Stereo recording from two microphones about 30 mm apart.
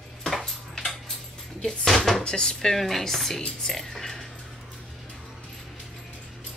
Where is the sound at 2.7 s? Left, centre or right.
Centre.